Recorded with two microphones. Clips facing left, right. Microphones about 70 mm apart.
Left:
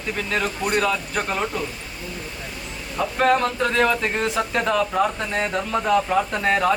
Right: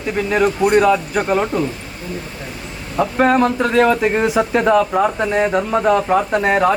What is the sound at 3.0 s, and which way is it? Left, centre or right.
Speech, centre.